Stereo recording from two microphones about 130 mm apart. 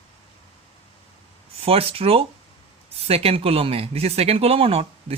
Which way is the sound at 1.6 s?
50° right (ahead or behind).